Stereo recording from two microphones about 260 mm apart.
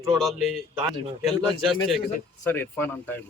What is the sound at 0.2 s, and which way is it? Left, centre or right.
Speech, centre.